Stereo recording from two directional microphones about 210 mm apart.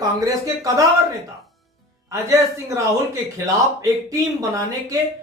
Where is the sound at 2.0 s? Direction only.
15° right (ahead or behind).